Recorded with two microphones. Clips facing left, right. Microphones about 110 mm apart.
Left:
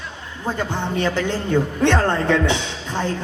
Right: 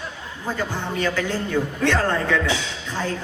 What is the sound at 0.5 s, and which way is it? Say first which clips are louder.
Speech: left 2 dB; 25° left (ahead or behind).